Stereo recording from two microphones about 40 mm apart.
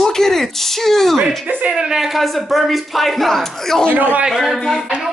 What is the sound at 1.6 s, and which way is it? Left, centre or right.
Speech, right.